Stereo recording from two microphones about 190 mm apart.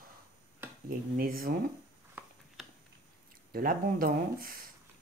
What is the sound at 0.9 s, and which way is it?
Speech, 45° right (ahead or behind).